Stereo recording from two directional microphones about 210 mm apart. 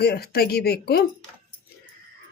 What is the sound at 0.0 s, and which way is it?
Speech, 50° left (ahead or behind).